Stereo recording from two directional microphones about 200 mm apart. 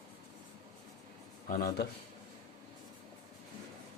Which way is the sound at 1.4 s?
45° left (ahead or behind).